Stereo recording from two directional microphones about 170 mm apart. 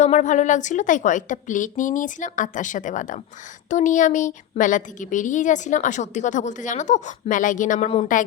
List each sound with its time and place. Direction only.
0.0 s a woman's voice: 45° left (ahead or behind)